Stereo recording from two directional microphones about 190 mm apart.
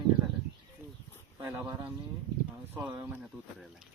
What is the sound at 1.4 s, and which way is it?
Speech, 15° right (ahead or behind).